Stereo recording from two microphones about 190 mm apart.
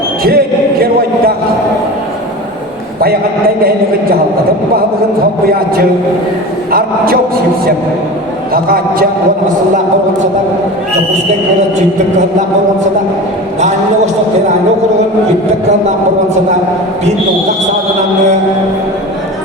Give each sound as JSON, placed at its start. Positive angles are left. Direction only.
{"t": 0.3, "sound": "speech", "side_deg": -55}
{"t": 5.5, "sound": "a man's voice", "side_deg": -50}
{"t": 8.5, "sound": "a man's voice", "side_deg": -50}